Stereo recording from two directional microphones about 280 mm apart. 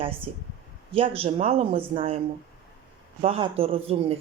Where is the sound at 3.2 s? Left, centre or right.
Centre.